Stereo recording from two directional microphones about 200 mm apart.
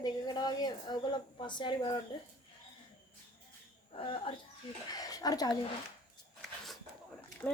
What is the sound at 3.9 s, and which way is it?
A woman's voice, 25° left (ahead or behind).